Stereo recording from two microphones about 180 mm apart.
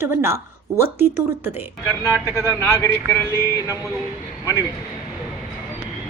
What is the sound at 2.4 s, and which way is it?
Speech, 15° left (ahead or behind).